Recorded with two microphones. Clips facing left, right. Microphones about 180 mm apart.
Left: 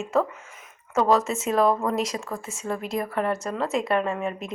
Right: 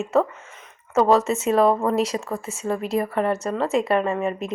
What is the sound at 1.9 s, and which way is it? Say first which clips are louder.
Speech: right 4 dB; 30° right (ahead or behind).